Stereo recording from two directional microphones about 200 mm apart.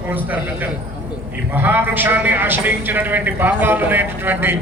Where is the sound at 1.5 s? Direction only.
10° right (ahead or behind).